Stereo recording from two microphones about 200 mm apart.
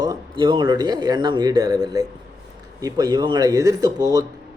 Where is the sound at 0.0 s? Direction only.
20° right (ahead or behind).